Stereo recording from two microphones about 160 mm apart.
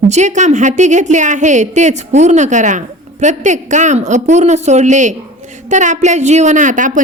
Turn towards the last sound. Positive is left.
turn(degrees=-55)  # may be behind; listen again after turning